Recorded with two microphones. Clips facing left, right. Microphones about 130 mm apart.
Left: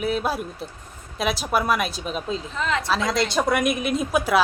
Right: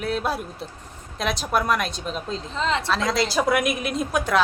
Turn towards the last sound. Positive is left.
turn(degrees=5)  # may be behind; listen again after turning